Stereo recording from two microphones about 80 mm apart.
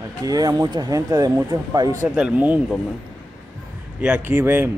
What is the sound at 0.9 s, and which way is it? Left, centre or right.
Speech, right.